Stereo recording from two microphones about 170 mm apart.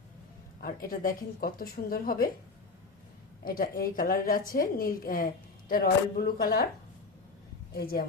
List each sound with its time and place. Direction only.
0.6 s a woman's voice: 55° left (ahead or behind)
3.4 s a woman's voice: 60° left (ahead or behind)
7.7 s a woman's voice: 60° left (ahead or behind)